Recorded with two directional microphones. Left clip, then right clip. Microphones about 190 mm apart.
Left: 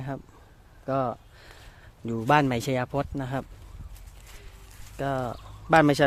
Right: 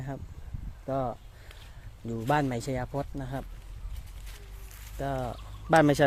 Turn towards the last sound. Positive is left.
turn(degrees=5)  # may be behind; listen again after turning